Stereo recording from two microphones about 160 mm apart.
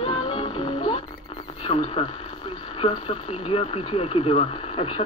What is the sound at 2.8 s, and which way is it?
Speech, 35° left (ahead or behind).